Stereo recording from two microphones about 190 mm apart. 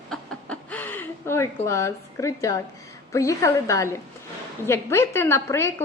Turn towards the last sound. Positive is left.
turn(degrees=15)  # may be behind; listen again after turning